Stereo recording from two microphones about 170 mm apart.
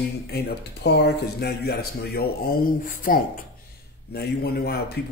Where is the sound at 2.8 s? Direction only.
55° left (ahead or behind).